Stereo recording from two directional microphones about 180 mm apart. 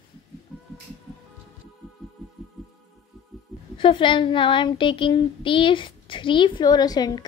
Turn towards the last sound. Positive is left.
turn(degrees=20)  # may be behind; listen again after turning